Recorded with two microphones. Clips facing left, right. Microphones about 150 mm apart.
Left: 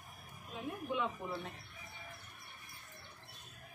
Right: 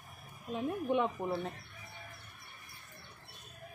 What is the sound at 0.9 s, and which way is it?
Speech, 45° right (ahead or behind).